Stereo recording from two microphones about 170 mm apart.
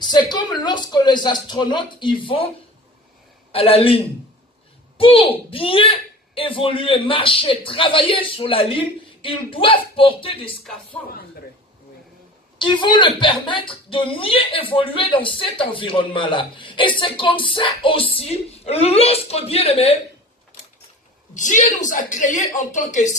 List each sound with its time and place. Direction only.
0.0 s a man's voice: 25° left (ahead or behind)
3.5 s a woman's voice: 35° left (ahead or behind)
12.5 s a woman's voice: 30° left (ahead or behind)
21.3 s a woman's voice: 50° left (ahead or behind)